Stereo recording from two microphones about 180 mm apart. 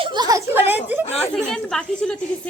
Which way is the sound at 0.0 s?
25° right (ahead or behind).